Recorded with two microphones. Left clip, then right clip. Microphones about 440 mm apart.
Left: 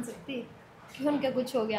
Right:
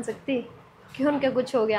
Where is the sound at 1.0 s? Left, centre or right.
Right.